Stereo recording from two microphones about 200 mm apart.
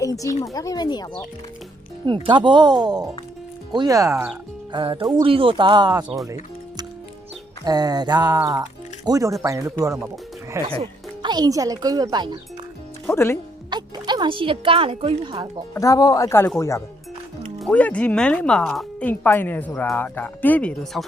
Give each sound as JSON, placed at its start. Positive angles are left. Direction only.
{"t": 0.0, "sound": "speech", "side_deg": 15}
{"t": 2.0, "sound": "speech", "side_deg": -25}
{"t": 7.6, "sound": "speech", "side_deg": -20}
{"t": 13.1, "sound": "speech", "side_deg": 15}
{"t": 13.7, "sound": "speech", "side_deg": -20}
{"t": 15.7, "sound": "speech", "side_deg": 15}